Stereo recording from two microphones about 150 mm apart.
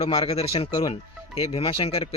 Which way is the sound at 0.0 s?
40° left (ahead or behind).